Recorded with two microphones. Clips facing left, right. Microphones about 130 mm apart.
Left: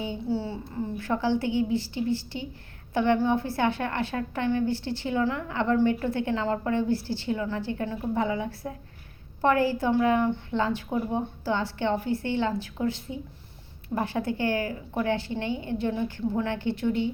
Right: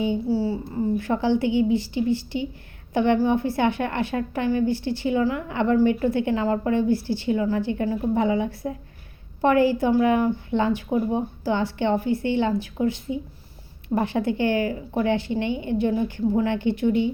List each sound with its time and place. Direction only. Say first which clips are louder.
0.0 s speech: right 7 dB; 10° right (ahead or behind)
0.9 s a woman's voice: right 2 dB; 15° right (ahead or behind)